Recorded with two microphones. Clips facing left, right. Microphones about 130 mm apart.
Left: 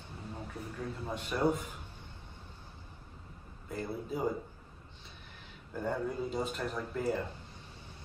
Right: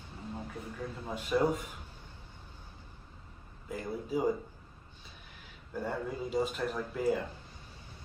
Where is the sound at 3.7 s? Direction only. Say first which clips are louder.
Right 2 dB; 10° right (ahead or behind).